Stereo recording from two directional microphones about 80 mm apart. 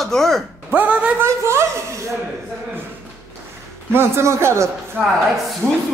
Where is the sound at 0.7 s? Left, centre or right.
Centre.